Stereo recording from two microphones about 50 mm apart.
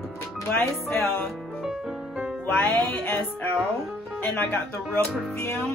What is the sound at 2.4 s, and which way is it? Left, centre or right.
Music, left.